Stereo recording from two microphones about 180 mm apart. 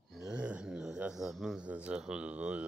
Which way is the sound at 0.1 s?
5° right (ahead or behind).